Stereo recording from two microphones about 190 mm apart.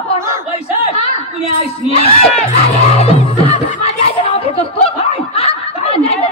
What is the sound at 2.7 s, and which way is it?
Music, 30° left (ahead or behind).